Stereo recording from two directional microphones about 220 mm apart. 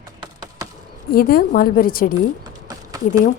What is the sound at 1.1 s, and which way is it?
A woman's voice, 40° left (ahead or behind).